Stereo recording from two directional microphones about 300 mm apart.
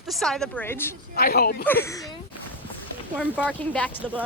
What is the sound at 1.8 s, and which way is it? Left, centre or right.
Speech, centre.